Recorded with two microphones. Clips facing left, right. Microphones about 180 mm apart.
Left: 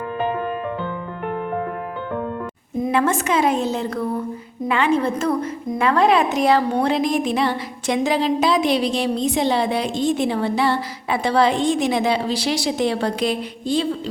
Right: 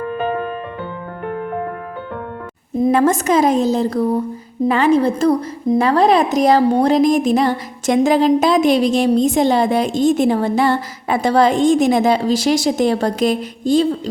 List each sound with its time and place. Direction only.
2.8 s a woman's voice: 40° right (ahead or behind)